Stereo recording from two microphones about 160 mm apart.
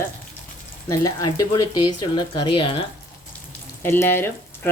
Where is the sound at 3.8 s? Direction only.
15° left (ahead or behind).